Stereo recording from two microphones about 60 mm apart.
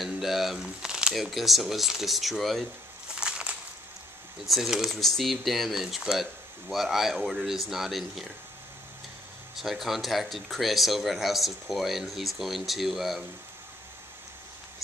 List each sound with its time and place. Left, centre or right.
0.0 s speech: centre
3.2 s a sound: centre
4.5 s speech: centre
4.9 s speech: centre
9.6 s speech: centre